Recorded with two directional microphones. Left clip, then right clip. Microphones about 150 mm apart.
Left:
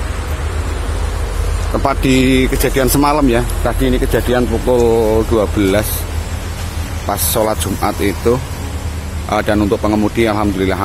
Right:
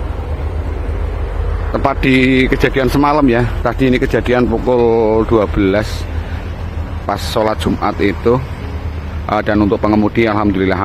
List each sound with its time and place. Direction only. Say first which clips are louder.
1.8 s speech: right 1 dB; 5° left (ahead or behind)
3.6 s speech: right 2 dB; 20° right (ahead or behind); by 5.9 s centre (ahead or behind)
7.1 s speech: even; centre (ahead or behind)